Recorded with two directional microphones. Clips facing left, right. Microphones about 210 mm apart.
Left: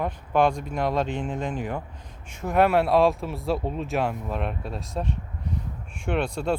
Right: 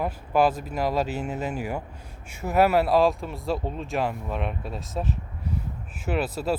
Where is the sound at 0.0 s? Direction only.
5° right (ahead or behind).